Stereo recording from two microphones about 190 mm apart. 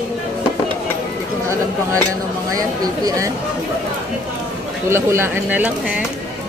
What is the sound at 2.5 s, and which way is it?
Speech, 20° right (ahead or behind).